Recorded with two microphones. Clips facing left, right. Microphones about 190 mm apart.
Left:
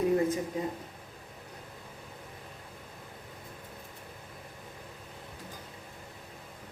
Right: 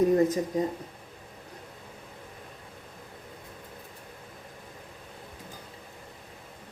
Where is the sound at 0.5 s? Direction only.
40° right (ahead or behind).